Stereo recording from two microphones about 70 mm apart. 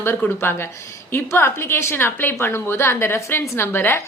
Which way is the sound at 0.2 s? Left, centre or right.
Left.